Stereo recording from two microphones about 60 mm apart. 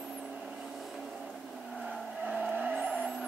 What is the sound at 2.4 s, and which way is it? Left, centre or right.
Vehicle, right.